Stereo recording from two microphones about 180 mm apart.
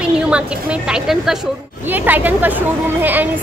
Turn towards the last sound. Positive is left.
turn(degrees=-10)  # may be behind; listen again after turning